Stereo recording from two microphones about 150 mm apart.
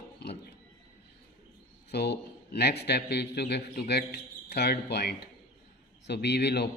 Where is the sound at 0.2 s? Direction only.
90° left.